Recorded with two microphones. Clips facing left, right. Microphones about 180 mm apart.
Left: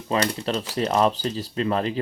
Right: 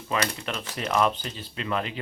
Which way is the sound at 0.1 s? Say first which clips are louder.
Left 5 dB; 35° left (ahead or behind).